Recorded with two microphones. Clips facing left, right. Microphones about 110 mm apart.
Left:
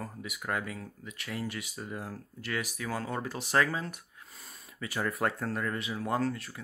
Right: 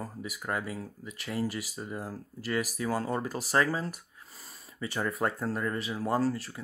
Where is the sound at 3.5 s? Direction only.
35° right (ahead or behind).